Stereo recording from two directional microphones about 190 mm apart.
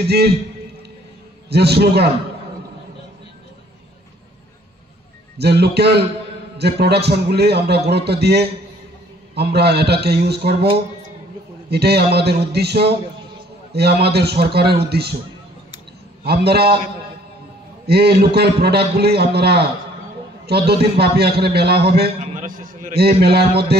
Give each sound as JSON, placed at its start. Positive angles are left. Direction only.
{"t": 0.0, "sound": "a man's voice", "side_deg": -60}
{"t": 1.5, "sound": "a man's voice", "side_deg": -60}
{"t": 5.4, "sound": "a man's voice", "side_deg": -60}
{"t": 11.7, "sound": "a man's voice", "side_deg": -60}
{"t": 16.3, "sound": "a man's voice", "side_deg": -60}
{"t": 17.8, "sound": "a man's voice", "side_deg": -60}
{"t": 22.2, "sound": "a man's voice", "side_deg": -40}